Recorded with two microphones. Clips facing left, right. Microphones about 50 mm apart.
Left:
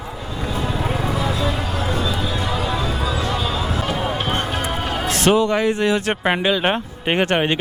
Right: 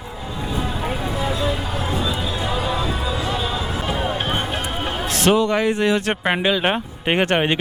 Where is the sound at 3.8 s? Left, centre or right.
Right.